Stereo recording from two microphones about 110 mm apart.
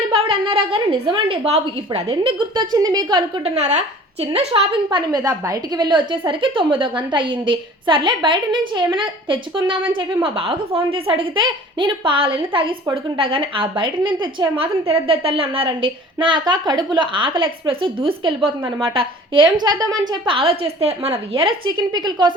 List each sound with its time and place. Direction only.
0.1 s a woman's voice: 55° right (ahead or behind)
2.0 s a woman's voice: 50° right (ahead or behind)
3.4 s a woman's voice: 85° right
4.3 s a woman's voice: 55° right (ahead or behind)
14.6 s a woman's voice: 60° right (ahead or behind)
21.3 s a woman's voice: 50° right (ahead or behind)